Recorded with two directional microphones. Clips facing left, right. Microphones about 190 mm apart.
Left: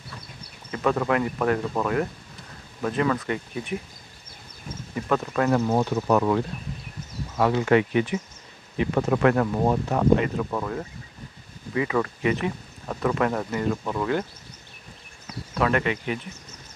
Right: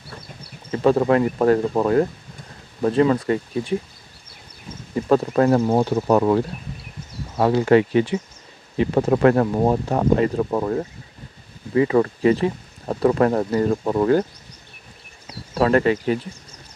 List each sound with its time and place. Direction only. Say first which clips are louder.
0.7 s speech: right 7 dB; 30° right (ahead or behind)
4.9 s speech: right 7 dB; 30° right (ahead or behind)
15.2 s speech: right 5 dB; 35° right (ahead or behind)